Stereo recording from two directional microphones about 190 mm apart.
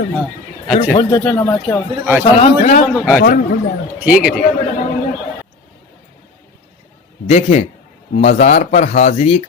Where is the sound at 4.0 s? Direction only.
5° right (ahead or behind).